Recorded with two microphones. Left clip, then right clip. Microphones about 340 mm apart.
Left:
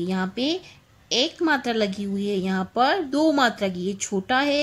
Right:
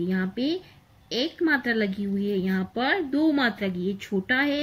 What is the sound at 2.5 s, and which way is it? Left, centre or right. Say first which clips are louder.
A woman's voice: left 7 dB; left.